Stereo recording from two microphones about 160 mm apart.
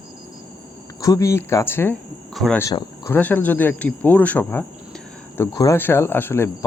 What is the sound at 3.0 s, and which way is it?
Speech, 10° left (ahead or behind).